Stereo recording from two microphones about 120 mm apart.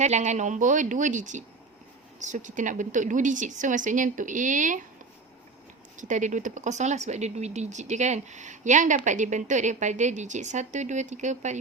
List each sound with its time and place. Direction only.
0.0 s a woman's voice: 75° right (ahead or behind); by 4.9 s 90° right
6.0 s speech: 90° right